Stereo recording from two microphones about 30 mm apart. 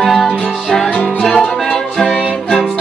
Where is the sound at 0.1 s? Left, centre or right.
Centre.